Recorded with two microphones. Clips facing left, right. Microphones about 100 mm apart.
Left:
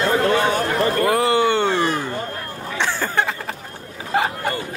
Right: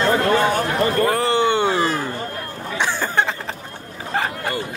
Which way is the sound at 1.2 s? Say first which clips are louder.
Left 1 dB; 25° right (ahead or behind).